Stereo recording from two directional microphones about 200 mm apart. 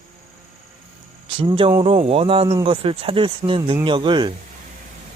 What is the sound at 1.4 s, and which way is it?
Speech, 25° right (ahead or behind).